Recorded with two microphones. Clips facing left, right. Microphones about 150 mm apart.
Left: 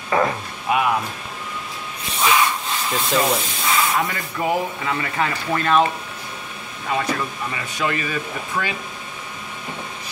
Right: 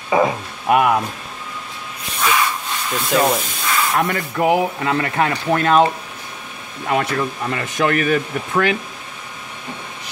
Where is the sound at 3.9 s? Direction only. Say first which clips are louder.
Right 4 dB; 60° right (ahead or behind).